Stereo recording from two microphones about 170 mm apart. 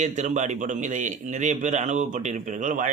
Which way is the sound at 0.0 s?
45° right (ahead or behind).